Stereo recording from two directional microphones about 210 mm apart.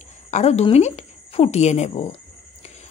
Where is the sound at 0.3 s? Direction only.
30° left (ahead or behind).